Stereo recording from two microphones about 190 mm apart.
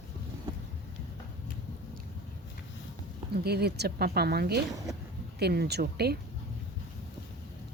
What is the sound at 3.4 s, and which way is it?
A woman's voice, 60° right (ahead or behind).